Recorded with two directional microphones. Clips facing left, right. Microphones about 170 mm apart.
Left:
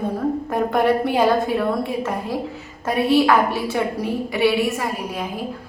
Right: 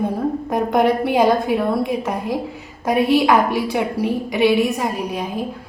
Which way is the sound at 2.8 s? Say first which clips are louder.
Right 1 dB; 15° right (ahead or behind).